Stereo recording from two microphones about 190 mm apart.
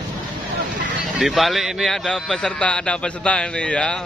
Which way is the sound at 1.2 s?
Centre (ahead or behind).